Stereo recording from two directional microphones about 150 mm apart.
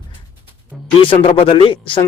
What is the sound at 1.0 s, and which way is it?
Speech, 35° left (ahead or behind).